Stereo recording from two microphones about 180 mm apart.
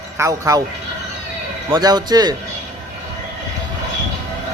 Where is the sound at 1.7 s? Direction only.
20° right (ahead or behind).